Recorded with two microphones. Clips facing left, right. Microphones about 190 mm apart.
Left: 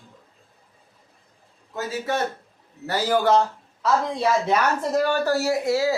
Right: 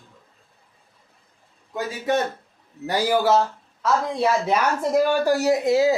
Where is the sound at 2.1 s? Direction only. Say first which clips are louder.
Right 6 dB; 15° right (ahead or behind).